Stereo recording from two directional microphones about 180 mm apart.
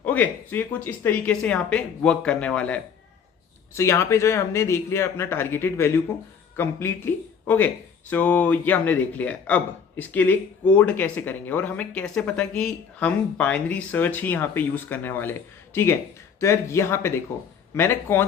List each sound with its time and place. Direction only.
0.0 s speech: 10° left (ahead or behind)